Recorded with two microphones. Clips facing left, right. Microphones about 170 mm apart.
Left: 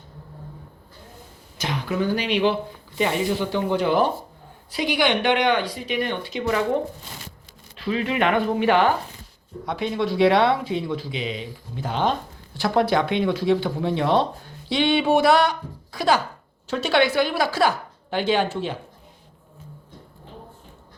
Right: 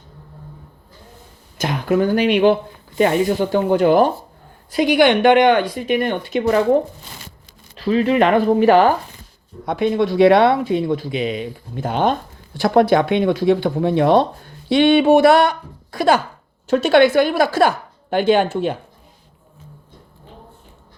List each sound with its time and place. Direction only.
1.5 s speech: 50° right (ahead or behind)
7.8 s speech: 40° right (ahead or behind)
9.6 s speech: 50° right (ahead or behind)